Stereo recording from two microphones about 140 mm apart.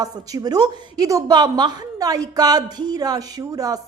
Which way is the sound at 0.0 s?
25° right (ahead or behind).